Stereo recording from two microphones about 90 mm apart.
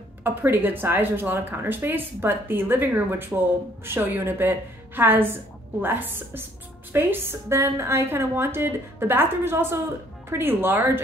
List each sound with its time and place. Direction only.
0.2 s speech: 20° right (ahead or behind)